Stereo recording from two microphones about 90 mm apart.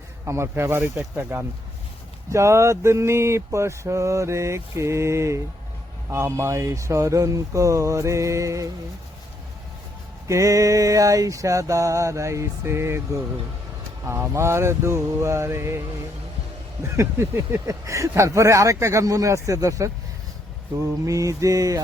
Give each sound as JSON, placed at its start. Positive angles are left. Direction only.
{"t": 0.3, "sound": "speech", "side_deg": -30}
{"t": 2.3, "sound": "mantra", "side_deg": -30}
{"t": 10.2, "sound": "mantra", "side_deg": -35}
{"t": 17.7, "sound": "mantra", "side_deg": -35}
{"t": 21.1, "sound": "mantra", "side_deg": -35}